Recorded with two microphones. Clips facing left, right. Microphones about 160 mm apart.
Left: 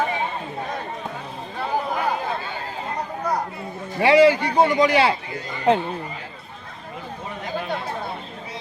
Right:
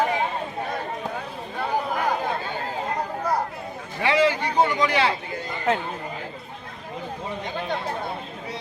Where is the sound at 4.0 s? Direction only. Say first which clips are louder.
Left 6 dB; 10° left (ahead or behind).